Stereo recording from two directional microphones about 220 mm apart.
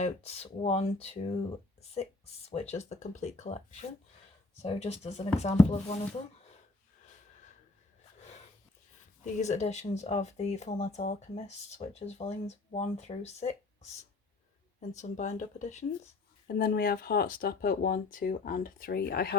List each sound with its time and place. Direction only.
0.0 s speech: 30° left (ahead or behind)
2.5 s speech: 30° left (ahead or behind)
9.2 s speech: 30° left (ahead or behind)
14.8 s speech: 35° left (ahead or behind)
16.6 s speech: 45° left (ahead or behind)